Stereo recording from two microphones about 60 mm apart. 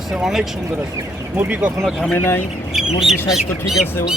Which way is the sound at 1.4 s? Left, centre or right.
Right.